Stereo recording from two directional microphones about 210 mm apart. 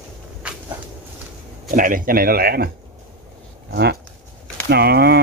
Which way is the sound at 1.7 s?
40° right (ahead or behind).